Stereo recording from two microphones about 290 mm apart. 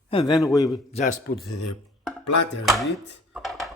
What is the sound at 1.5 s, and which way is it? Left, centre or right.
Speech, left.